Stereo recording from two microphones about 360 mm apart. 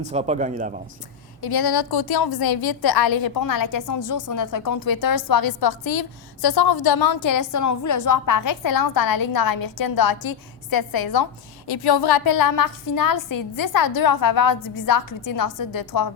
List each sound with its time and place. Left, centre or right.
0.1 s speech: centre
1.4 s a woman's voice: left